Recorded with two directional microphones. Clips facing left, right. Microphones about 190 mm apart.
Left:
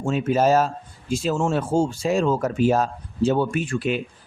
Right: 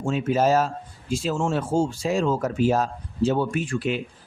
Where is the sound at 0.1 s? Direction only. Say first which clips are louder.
Left 2 dB; 45° left (ahead or behind).